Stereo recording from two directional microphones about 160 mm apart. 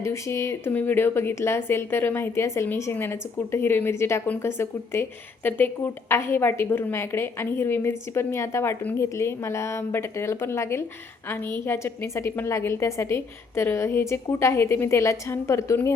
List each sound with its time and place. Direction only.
0.0 s a woman's voice: 20° left (ahead or behind)